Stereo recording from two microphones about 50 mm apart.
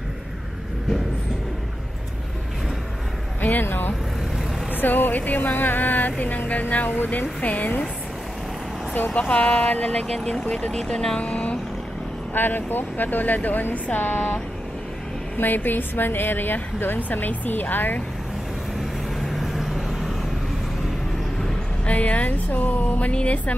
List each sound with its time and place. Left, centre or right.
3.3 s a woman's voice: left
8.9 s a woman's voice: left
9.2 s speech: left
9.9 s speech: centre
11.1 s speech: left
12.4 s a woman's voice: left
19.2 s vehicle: centre
21.8 s a woman's voice: left